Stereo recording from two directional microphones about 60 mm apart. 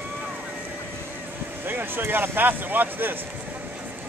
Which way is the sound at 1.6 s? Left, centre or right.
Right.